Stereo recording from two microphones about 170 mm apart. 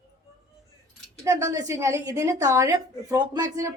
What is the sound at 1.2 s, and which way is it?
A woman's voice, 20° right (ahead or behind).